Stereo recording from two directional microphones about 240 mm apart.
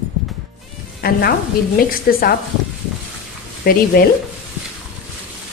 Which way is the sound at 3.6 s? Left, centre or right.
Left.